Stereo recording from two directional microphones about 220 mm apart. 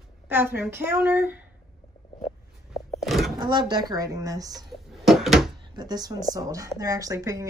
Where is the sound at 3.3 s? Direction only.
20° right (ahead or behind).